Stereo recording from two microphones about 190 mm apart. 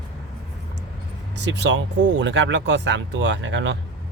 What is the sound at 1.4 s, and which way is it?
Speech, 65° right (ahead or behind).